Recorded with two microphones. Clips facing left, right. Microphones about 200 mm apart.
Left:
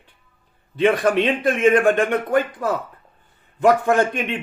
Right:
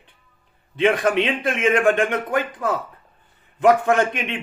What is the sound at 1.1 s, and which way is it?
Speech, 35° left (ahead or behind).